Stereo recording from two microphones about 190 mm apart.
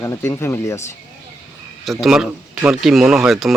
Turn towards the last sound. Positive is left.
turn(degrees=0)  # may be behind; listen again after turning